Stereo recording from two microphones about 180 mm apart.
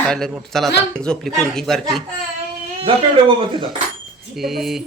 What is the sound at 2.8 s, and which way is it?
Speech, 30° right (ahead or behind).